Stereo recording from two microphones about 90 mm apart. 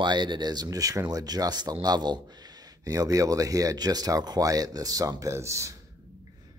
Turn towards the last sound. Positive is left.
turn(degrees=-35)  # may be behind; listen again after turning